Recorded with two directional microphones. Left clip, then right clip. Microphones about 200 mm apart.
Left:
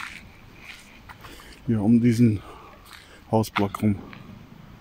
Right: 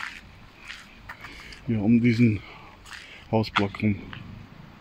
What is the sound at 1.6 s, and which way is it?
Speech, 10° left (ahead or behind).